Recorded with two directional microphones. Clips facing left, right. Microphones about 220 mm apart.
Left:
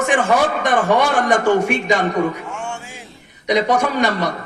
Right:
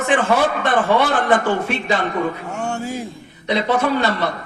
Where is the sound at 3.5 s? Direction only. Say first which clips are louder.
Left 1 dB; 15° left (ahead or behind).